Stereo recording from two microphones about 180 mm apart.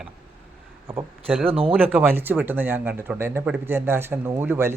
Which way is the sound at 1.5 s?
30° right (ahead or behind).